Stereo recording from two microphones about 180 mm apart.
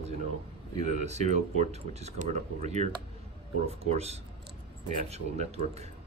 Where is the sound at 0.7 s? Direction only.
40° right (ahead or behind).